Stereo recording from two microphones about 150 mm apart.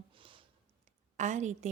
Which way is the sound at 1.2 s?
50° right (ahead or behind).